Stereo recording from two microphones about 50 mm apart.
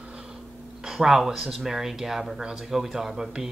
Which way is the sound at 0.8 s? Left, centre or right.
Centre.